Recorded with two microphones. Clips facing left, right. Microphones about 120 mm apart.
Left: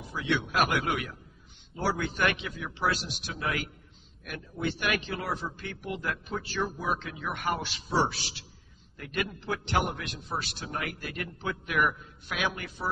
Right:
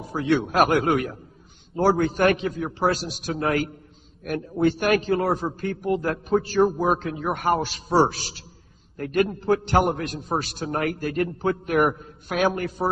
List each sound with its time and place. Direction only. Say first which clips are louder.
0.1 s a man's voice: right 8 dB; 40° right (ahead or behind)